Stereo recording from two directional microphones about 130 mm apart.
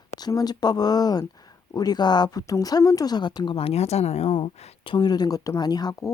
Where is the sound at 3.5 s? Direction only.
50° left (ahead or behind).